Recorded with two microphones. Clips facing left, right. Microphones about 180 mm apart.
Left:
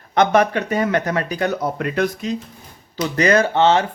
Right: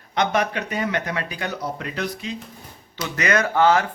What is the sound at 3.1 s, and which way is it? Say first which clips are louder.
Speech: left 4 dB; 30° left (ahead or behind).